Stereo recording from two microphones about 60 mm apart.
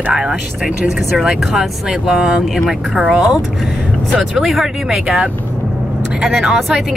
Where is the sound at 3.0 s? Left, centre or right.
Centre.